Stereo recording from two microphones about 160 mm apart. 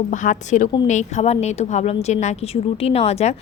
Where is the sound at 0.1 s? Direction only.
50° left (ahead or behind).